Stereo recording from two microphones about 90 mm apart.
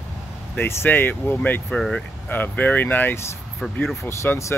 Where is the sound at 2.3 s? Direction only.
20° left (ahead or behind).